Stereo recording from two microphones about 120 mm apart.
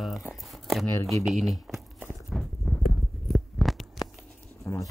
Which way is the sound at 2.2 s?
Centre (ahead or behind).